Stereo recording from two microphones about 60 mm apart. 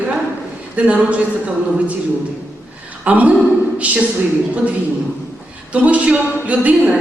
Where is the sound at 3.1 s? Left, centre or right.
Right.